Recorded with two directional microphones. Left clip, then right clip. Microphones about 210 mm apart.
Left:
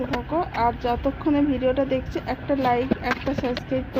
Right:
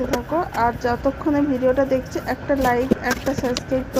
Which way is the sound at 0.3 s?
20° right (ahead or behind).